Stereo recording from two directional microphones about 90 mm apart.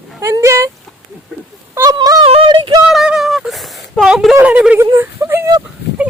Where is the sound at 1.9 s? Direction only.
45° right (ahead or behind).